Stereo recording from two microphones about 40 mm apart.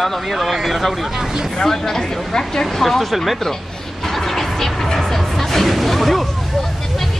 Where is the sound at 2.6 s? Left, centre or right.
Centre.